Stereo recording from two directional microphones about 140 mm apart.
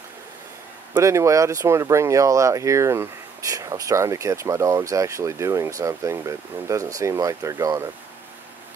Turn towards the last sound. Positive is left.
turn(degrees=-25)  # may be behind; listen again after turning